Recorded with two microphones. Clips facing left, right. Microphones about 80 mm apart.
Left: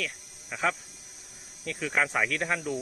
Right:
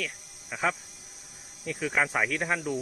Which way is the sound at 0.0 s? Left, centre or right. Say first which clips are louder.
Even; centre.